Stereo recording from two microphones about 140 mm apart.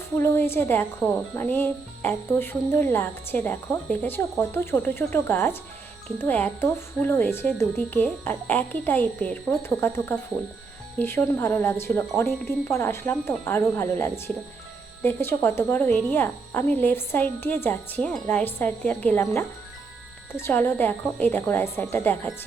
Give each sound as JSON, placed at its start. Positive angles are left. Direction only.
{"t": 0.2, "sound": "speech", "side_deg": 15}
{"t": 20.3, "sound": "speech", "side_deg": 15}